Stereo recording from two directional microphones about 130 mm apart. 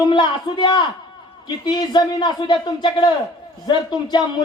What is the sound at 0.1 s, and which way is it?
A man's voice, 35° left (ahead or behind).